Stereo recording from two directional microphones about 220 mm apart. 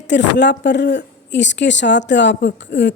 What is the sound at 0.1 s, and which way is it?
A woman's voice, 50° left (ahead or behind).